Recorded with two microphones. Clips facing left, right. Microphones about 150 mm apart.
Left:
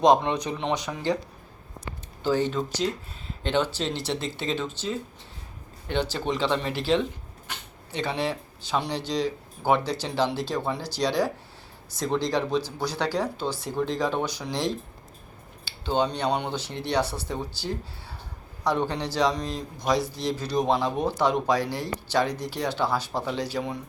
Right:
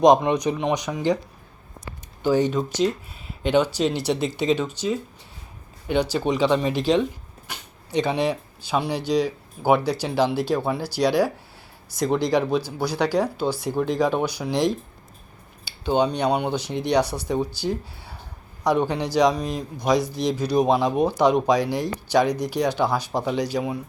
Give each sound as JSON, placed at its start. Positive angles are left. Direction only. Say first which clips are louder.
{"t": 0.0, "sound": "speech", "louder": "right 4 dB", "side_deg": -15}
{"t": 2.2, "sound": "speech", "louder": "right 4 dB", "side_deg": -15}